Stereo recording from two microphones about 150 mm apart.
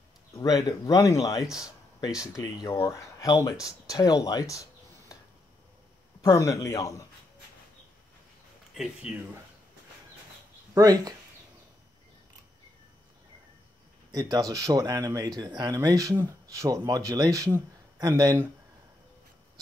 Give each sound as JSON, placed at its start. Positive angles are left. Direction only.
{"t": 0.4, "sound": "speech", "side_deg": 25}
{"t": 2.0, "sound": "speech", "side_deg": -5}
{"t": 2.6, "sound": "speech", "side_deg": 30}
{"t": 6.2, "sound": "speech", "side_deg": 20}
{"t": 9.1, "sound": "speech", "side_deg": -10}
{"t": 10.7, "sound": "speech", "side_deg": -25}
{"t": 14.1, "sound": "speech", "side_deg": -25}